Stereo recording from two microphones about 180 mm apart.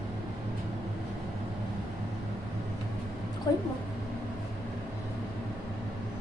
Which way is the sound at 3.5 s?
20° left (ahead or behind).